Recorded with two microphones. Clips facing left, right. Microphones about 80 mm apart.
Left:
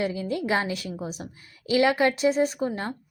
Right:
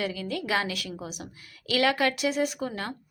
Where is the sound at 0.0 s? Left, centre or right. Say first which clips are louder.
Left 4 dB; left.